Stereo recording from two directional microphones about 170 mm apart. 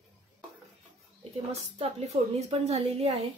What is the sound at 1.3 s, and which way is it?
A woman's voice, 35° right (ahead or behind).